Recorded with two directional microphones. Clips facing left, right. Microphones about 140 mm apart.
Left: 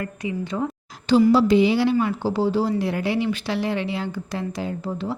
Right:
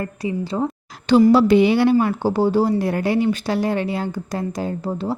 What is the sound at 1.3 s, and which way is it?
Speech, 60° right (ahead or behind).